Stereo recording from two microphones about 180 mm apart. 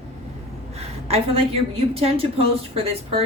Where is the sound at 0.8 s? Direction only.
35° right (ahead or behind).